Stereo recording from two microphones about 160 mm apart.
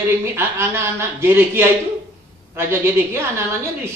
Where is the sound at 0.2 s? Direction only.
15° right (ahead or behind).